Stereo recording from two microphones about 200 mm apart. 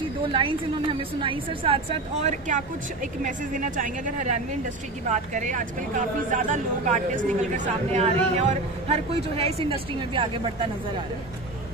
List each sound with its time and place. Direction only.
0.3 s a woman's voice: 25° right (ahead or behind)